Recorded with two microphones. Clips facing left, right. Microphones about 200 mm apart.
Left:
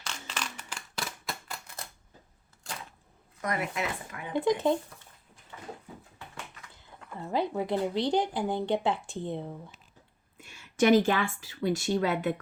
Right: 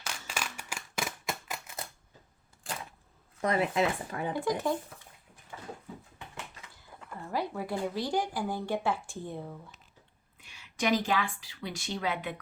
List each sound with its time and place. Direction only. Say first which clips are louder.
0.0 s a sound: even; 10° right (ahead or behind)
3.4 s speech: right 5 dB; 30° right (ahead or behind)
4.4 s speech: left 6 dB; 20° left (ahead or behind)
7.2 s speech: left 4 dB; 20° left (ahead or behind)
10.4 s speech: left 7 dB; 50° left (ahead or behind)